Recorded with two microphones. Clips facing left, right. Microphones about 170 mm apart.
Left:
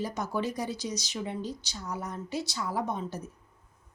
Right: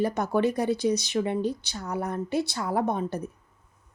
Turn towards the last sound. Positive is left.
turn(degrees=-60)  # may be behind; listen again after turning